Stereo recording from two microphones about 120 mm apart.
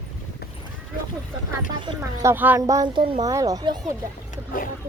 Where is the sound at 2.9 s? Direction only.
45° right (ahead or behind).